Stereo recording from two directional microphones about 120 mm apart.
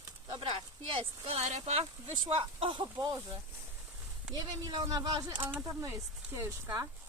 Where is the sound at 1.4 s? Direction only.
75° right (ahead or behind); by 2.8 s 45° right (ahead or behind).